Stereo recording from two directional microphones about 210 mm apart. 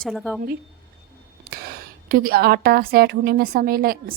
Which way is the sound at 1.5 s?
45° right (ahead or behind).